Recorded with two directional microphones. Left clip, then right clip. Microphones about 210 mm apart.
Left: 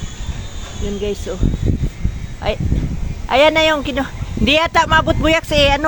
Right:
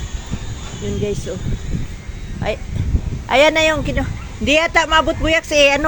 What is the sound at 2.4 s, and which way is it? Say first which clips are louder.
Speech: left 2 dB; 10° left (ahead or behind).